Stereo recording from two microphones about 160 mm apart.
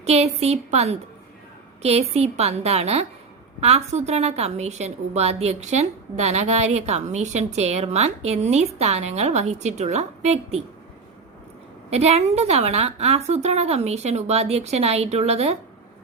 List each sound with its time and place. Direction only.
0.0 s a woman's voice: 40° right (ahead or behind)
11.9 s a woman's voice: 40° right (ahead or behind)